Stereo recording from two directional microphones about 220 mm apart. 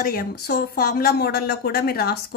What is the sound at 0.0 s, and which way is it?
Speech, 40° left (ahead or behind).